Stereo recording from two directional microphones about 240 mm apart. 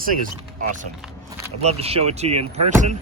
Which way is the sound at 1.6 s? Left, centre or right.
Right.